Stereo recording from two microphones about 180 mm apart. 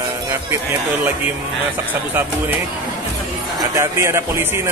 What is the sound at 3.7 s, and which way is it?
Speech, 15° right (ahead or behind).